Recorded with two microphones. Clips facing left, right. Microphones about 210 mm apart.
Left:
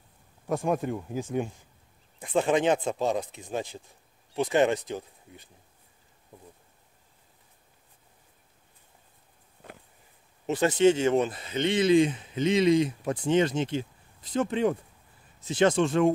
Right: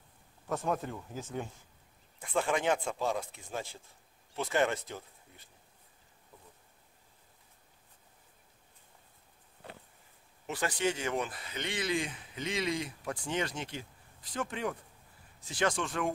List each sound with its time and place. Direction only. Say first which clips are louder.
0.5 s speech: left 6 dB; 15° left (ahead or behind)
10.4 s speech: left 11 dB; 25° left (ahead or behind)